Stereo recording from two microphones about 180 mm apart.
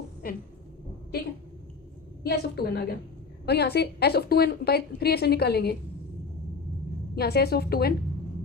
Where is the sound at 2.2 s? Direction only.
65° left (ahead or behind).